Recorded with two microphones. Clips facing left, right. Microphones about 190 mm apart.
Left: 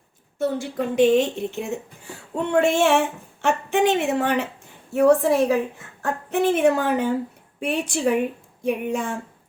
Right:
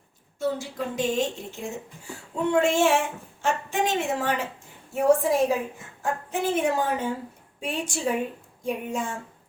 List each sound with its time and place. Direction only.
0.3 s a woman's voice: 60° left (ahead or behind)